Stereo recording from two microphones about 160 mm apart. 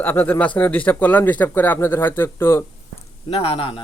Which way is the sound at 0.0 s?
10° left (ahead or behind).